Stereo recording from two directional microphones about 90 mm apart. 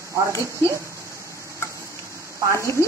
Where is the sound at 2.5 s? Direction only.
30° left (ahead or behind).